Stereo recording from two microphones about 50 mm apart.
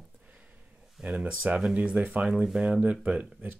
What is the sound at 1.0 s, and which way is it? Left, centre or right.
Speech, centre.